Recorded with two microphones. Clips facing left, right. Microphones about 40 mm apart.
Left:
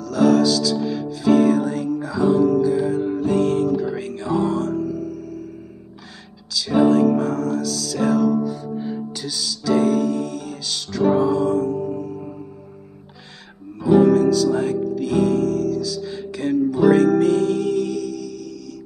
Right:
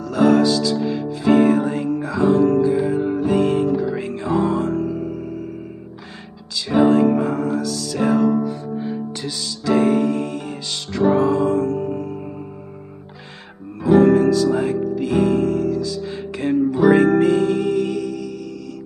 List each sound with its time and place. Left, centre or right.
0.0 s music: right
6.5 s music: right
8.6 s music: centre
9.2 s music: right
11.6 s music: right
13.8 s music: centre